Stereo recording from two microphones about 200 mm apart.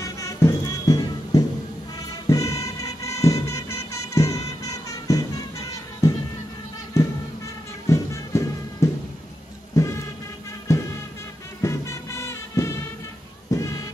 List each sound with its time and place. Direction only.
0.0 s music: 15° left (ahead or behind)
7.9 s music: 15° left (ahead or behind)